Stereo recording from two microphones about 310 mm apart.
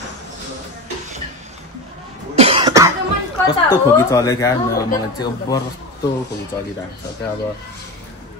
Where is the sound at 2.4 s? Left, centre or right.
Centre.